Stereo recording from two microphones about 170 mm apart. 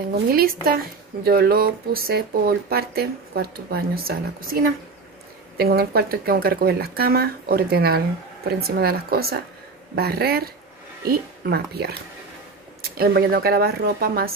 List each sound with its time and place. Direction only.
0.3 s speech: 60° right (ahead or behind)